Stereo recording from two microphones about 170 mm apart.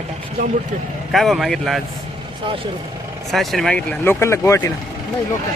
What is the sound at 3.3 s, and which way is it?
Speech, centre (ahead or behind).